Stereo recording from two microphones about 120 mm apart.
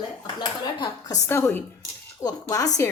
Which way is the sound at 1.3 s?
20° left (ahead or behind).